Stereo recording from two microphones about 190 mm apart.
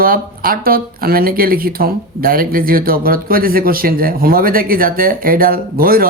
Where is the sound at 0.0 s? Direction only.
50° right (ahead or behind).